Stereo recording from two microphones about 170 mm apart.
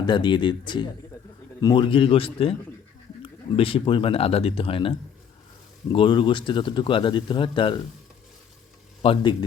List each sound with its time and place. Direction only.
0.0 s speech: 25° left (ahead or behind)
9.0 s speech: 30° left (ahead or behind)